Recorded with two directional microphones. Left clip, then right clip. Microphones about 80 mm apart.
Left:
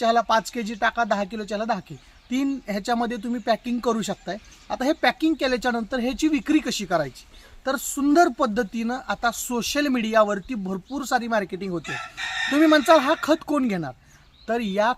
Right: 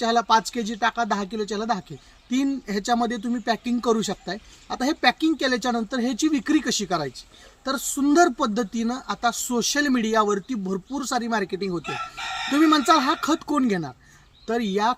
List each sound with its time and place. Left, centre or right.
0.0 s speech: left